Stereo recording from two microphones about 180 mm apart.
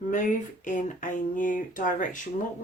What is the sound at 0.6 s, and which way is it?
Speech, 45° left (ahead or behind).